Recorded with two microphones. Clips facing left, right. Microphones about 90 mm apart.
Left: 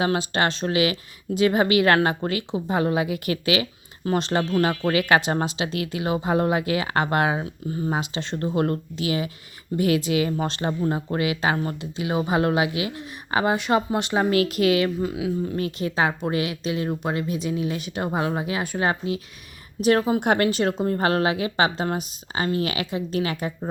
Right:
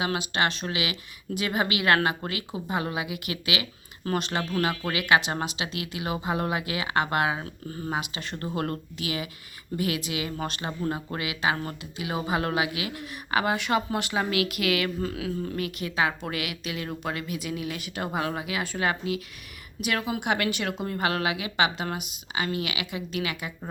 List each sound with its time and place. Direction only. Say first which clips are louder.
0.0 s speech: left 4 dB; 35° left (ahead or behind)
15.0 s speech: left 5 dB; 20° left (ahead or behind)
15.5 s speech: left 4 dB; 30° left (ahead or behind)